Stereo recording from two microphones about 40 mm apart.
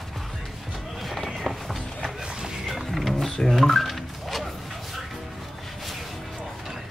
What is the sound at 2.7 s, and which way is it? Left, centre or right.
Music, centre.